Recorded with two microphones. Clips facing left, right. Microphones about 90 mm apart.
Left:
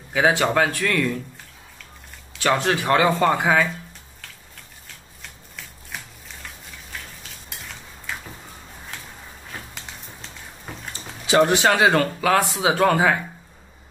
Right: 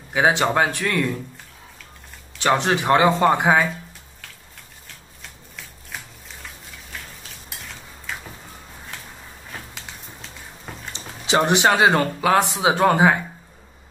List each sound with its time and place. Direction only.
0.1 s speech: 20° right (ahead or behind)
2.4 s speech: 20° right (ahead or behind)
5.6 s shuffling cards: centre (ahead or behind)
10.7 s a sound: centre (ahead or behind)
11.2 s speech: 20° right (ahead or behind)